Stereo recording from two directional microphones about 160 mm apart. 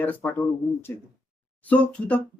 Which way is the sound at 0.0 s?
10° left (ahead or behind).